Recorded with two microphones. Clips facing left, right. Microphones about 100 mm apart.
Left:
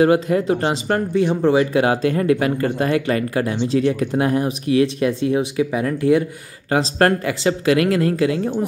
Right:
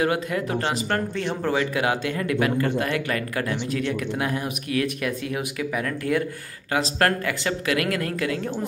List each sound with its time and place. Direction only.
0.0 s speech: 30° left (ahead or behind)
1.1 s speech: 15° left (ahead or behind)